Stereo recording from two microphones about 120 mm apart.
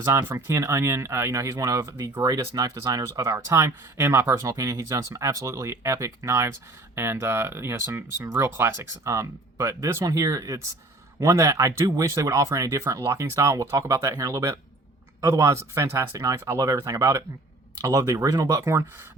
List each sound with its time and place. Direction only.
0.0 s speech: 25° right (ahead or behind)